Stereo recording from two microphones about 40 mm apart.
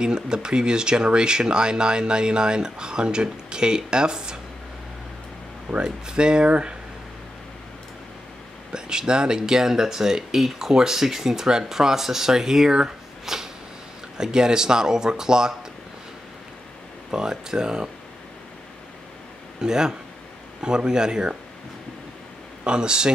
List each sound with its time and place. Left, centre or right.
0.0 s speech: centre
5.9 s speech: centre
8.7 s speech: centre
13.2 s a sound: centre
14.1 s speech: centre
17.1 s speech: centre
19.6 s speech: centre
22.7 s speech: right